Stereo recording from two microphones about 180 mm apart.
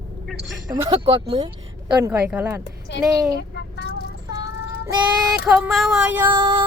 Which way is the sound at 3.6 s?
65° left (ahead or behind).